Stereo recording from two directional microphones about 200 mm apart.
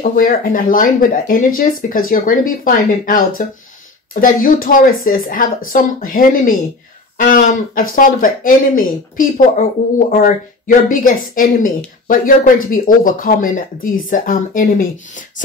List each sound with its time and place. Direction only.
0.0 s speech: 45° left (ahead or behind)